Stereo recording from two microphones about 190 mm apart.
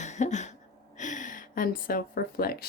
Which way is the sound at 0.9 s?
40° left (ahead or behind).